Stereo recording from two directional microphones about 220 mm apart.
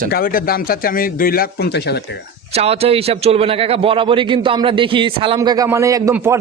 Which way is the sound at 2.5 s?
25° right (ahead or behind).